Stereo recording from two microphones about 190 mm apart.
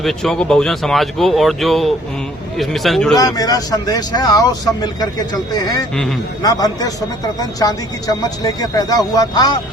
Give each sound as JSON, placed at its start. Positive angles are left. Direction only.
{"t": 0.0, "sound": "speech", "side_deg": 0}
{"t": 3.2, "sound": "speech", "side_deg": 20}